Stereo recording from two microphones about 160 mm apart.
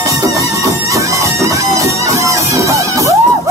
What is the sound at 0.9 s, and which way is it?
Music, 20° right (ahead or behind).